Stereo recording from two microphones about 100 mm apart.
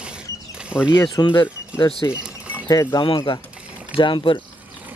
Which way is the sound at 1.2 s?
35° left (ahead or behind).